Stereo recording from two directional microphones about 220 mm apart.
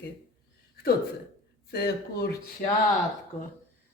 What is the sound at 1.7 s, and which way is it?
Speech, 45° left (ahead or behind).